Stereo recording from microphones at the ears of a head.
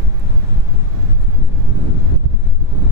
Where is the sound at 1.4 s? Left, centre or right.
Left.